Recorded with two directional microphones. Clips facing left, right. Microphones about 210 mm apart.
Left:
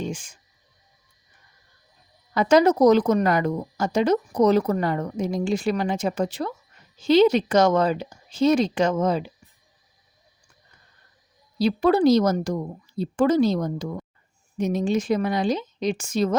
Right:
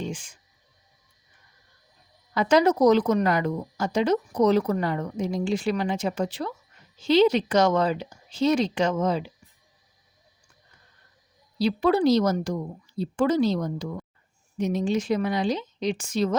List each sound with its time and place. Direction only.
0.0 s speech: 45° left (ahead or behind)
2.3 s speech: 45° left (ahead or behind)
11.5 s speech: 45° left (ahead or behind)